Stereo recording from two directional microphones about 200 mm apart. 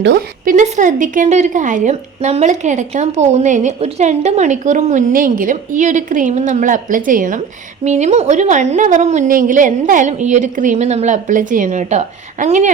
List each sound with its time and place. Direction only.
0.0 s a woman's voice: 60° right (ahead or behind)
0.5 s a woman's voice: 40° right (ahead or behind)